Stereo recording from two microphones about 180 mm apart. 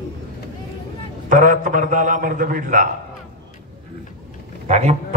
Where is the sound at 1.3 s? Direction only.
45° right (ahead or behind).